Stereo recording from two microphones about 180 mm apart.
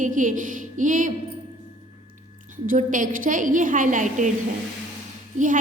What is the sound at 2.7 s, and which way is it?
A woman's voice, 45° right (ahead or behind).